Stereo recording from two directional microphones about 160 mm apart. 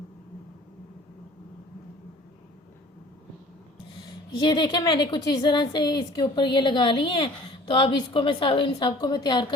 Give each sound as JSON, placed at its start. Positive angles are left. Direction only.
{"t": 4.0, "sound": "a woman's voice", "side_deg": 25}